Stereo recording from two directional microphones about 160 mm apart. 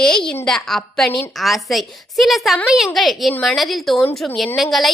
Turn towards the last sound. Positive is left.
turn(degrees=0)  # may be behind; listen again after turning